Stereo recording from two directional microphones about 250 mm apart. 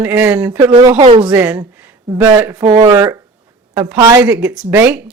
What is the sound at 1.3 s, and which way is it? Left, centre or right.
A woman's voice, centre.